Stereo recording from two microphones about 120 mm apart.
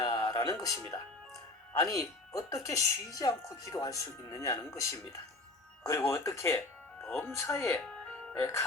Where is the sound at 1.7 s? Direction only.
30° left (ahead or behind).